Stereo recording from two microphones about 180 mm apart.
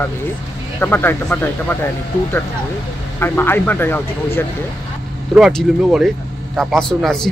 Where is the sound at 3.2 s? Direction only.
10° left (ahead or behind).